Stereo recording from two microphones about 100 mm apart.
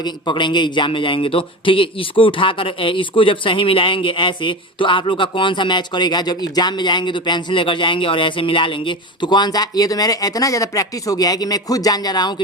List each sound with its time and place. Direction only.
0.0 s speech: 50° left (ahead or behind)